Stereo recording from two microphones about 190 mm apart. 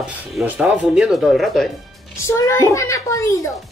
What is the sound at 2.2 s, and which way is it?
A woman's voice, 15° left (ahead or behind).